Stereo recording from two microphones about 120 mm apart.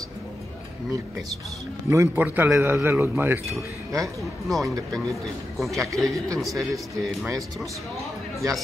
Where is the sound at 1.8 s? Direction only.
25° right (ahead or behind).